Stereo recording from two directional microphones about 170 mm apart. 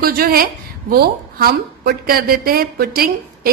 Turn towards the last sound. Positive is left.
turn(degrees=-65)  # may be behind; listen again after turning